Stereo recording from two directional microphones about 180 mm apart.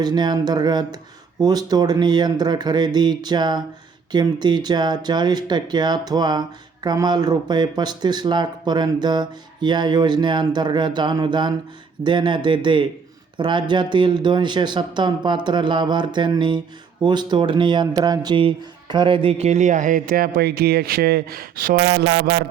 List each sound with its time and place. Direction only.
0.0 s speech: 25° right (ahead or behind); by 21.8 s 55° right (ahead or behind)
21.8 s speech: 25° right (ahead or behind)